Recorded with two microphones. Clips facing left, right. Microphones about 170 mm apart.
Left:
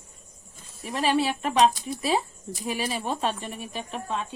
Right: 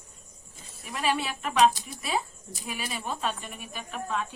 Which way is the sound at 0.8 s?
30° left (ahead or behind).